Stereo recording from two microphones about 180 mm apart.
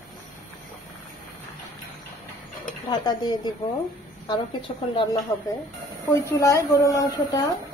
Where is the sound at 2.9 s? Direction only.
25° left (ahead or behind).